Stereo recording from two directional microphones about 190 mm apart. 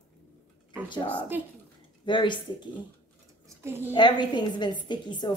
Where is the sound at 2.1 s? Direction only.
25° left (ahead or behind).